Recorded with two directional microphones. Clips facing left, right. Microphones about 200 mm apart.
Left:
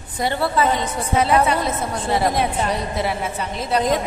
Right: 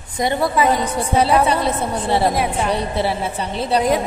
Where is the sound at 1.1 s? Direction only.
30° right (ahead or behind).